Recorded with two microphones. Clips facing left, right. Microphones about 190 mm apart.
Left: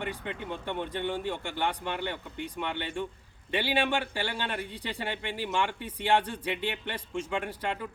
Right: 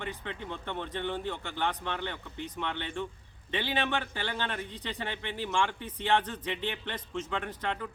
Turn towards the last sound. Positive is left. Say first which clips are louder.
# left 2 dB
turn(degrees=10)  # may be behind; listen again after turning